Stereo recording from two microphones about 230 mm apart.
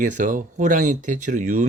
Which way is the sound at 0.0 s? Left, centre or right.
Right.